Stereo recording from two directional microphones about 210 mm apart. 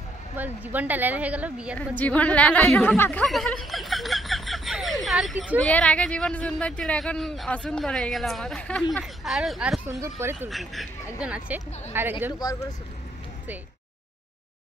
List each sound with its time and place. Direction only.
0.4 s speech: 10° right (ahead or behind)
2.0 s speech: 5° left (ahead or behind)
9.8 s speech: 15° right (ahead or behind)
10.5 s speech: centre (ahead or behind)